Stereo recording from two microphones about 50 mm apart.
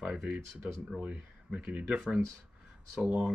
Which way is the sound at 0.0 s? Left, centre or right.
Centre.